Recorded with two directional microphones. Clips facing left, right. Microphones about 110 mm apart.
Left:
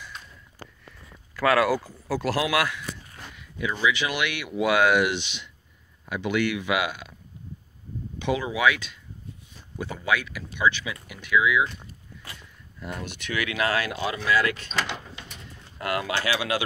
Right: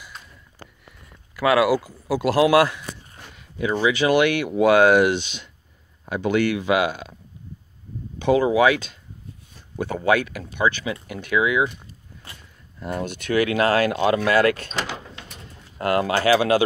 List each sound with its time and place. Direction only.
0.0 s sniff: 5° right (ahead or behind)
1.3 s speech: 10° right (ahead or behind)
2.3 s speech: 30° right (ahead or behind)
3.3 s a sound: 35° right (ahead or behind)
3.7 s speech: 40° right (ahead or behind)
8.2 s speech: 40° right (ahead or behind)
9.8 s speech: 50° right (ahead or behind)
12.8 s speech: 40° right (ahead or behind)
15.8 s speech: 40° right (ahead or behind)